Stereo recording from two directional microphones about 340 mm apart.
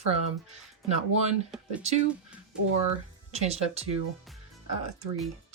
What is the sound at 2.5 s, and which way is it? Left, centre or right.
Speech, centre.